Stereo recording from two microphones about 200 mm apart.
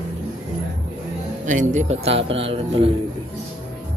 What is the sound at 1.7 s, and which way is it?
Speech, 35° right (ahead or behind).